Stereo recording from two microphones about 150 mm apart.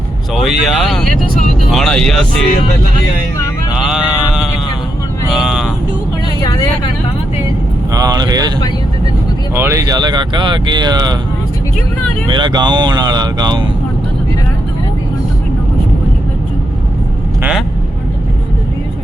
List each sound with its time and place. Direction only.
0.4 s speech: centre (ahead or behind)
3.7 s a sound: 5° right (ahead or behind)
5.3 s vehicle: 5° right (ahead or behind)
7.9 s speech: 25° right (ahead or behind)
9.6 s speech: 20° right (ahead or behind)
12.3 s speech: 30° right (ahead or behind)